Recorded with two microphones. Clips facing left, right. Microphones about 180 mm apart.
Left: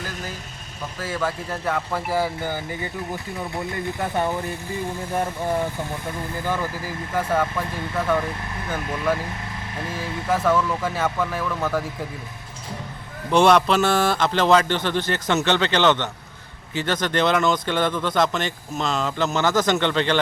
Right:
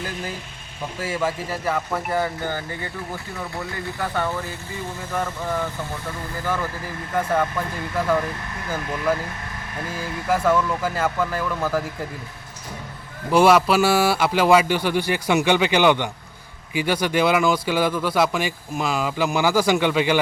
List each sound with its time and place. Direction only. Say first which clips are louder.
0.9 s speech: right 2 dB; 10° right (ahead or behind); by 2.6 s 10° left (ahead or behind)
3.6 s speech: left 2 dB; 20° left (ahead or behind)
7.1 s speech: right 1 dB; centre (ahead or behind)
13.3 s speech: right 1 dB; 5° right (ahead or behind)